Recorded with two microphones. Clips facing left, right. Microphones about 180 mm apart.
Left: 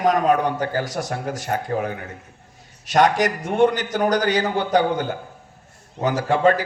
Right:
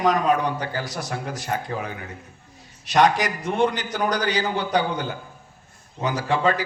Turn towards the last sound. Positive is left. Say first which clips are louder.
# left 4 dB
turn(degrees=50)  # may be behind; listen again after turning